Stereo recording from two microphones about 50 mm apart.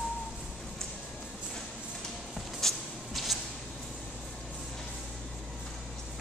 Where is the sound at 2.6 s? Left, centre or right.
Centre.